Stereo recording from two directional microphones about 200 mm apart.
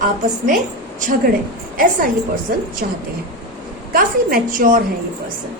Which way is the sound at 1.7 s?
45° right (ahead or behind).